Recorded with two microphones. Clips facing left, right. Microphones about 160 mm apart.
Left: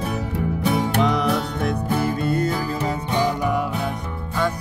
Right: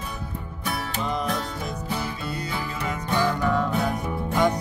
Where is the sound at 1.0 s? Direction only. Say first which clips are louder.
Left 7 dB; 80° left.